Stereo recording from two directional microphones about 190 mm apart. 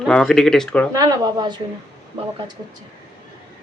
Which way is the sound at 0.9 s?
20° right (ahead or behind).